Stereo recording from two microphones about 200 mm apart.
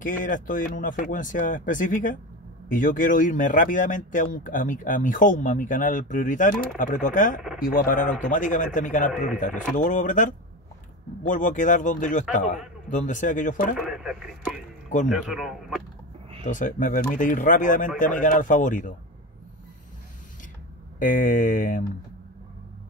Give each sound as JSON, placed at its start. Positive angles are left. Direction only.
{"t": 0.0, "sound": "speech", "side_deg": 40}
{"t": 13.7, "sound": "a man's voice", "side_deg": 0}
{"t": 16.4, "sound": "speech", "side_deg": 40}
{"t": 21.0, "sound": "speech", "side_deg": 40}